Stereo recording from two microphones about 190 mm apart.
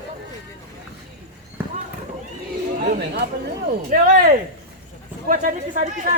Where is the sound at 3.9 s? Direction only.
45° right (ahead or behind).